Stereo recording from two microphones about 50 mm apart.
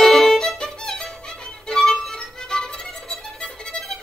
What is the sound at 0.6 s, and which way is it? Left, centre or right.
Music, centre.